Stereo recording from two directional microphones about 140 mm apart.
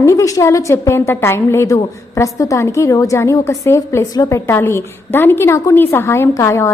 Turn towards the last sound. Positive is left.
turn(degrees=20)  # may be behind; listen again after turning